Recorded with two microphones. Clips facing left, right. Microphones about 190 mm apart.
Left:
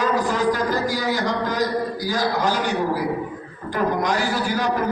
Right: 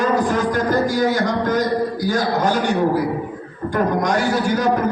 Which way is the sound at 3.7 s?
45° right (ahead or behind).